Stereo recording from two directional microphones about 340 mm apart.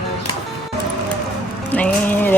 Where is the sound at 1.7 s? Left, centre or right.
Centre.